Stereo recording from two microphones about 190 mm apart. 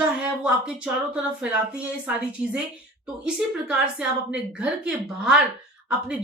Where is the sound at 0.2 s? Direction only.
5° right (ahead or behind).